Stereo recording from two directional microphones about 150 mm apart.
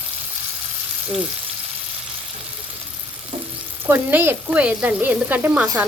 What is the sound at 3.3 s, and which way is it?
Stir, 40° right (ahead or behind).